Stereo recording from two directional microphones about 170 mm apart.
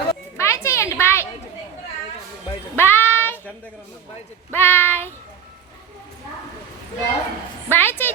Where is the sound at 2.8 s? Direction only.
15° left (ahead or behind).